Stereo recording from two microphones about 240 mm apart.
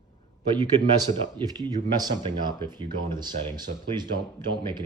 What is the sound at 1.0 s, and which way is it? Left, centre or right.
Speech, centre.